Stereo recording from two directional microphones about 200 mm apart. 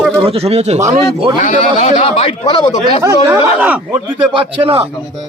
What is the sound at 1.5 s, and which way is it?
Speech, 35° left (ahead or behind).